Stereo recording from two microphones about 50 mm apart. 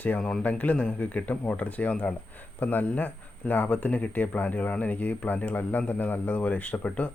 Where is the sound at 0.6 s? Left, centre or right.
Left.